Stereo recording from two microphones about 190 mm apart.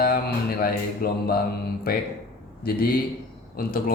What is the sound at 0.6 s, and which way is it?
Speech, 50° left (ahead or behind).